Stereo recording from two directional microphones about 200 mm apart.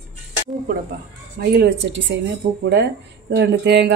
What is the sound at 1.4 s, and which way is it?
Speech, 55° right (ahead or behind).